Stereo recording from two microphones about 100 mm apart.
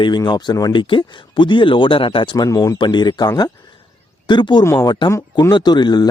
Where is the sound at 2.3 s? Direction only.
40° left (ahead or behind).